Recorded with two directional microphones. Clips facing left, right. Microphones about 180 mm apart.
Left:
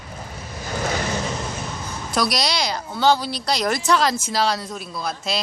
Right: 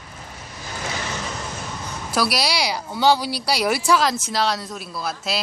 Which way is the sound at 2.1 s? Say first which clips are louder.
Even; 5° right (ahead or behind).